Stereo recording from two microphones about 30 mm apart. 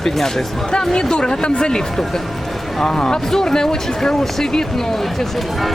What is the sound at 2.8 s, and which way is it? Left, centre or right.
Speech, left.